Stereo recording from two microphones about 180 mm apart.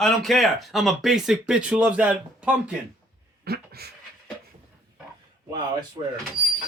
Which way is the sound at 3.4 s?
60° right (ahead or behind).